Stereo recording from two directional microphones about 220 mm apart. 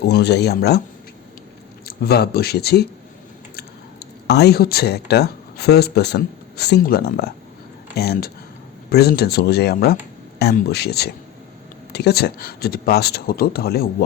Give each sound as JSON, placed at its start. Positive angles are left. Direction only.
{"t": 0.0, "sound": "speech", "side_deg": 50}
{"t": 1.9, "sound": "speech", "side_deg": 45}
{"t": 4.0, "sound": "speech", "side_deg": 50}